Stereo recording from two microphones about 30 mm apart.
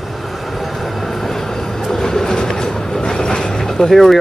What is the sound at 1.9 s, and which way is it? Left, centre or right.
Train, centre.